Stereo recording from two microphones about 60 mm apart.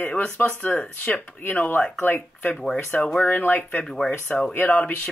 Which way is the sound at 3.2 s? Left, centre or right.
Left.